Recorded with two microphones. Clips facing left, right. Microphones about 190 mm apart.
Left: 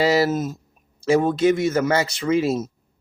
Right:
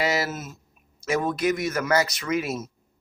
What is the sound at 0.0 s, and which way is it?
A man's voice, 30° left (ahead or behind).